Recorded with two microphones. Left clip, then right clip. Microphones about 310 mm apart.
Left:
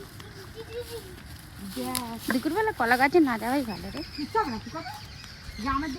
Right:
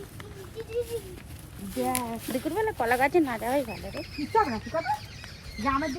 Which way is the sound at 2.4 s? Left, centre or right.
Centre.